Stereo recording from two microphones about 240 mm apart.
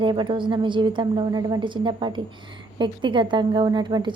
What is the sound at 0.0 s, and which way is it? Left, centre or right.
A woman's voice, centre.